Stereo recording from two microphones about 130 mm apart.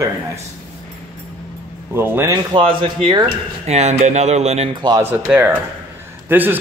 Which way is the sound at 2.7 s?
35° right (ahead or behind).